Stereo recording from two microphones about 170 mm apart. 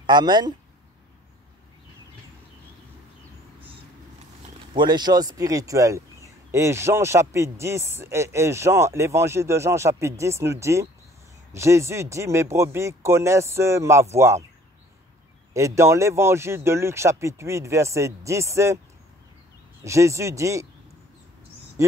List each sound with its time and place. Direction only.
0.0 s speech: 25° right (ahead or behind)
4.7 s speech: 25° right (ahead or behind)
15.5 s speech: 15° right (ahead or behind)
19.8 s speech: 15° right (ahead or behind)
21.8 s speech: 15° right (ahead or behind)